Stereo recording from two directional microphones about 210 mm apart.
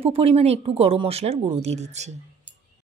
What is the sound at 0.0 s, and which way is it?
Speech, 30° right (ahead or behind).